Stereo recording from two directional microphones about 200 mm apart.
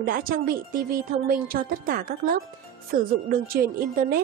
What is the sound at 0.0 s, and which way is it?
Speech, 45° right (ahead or behind).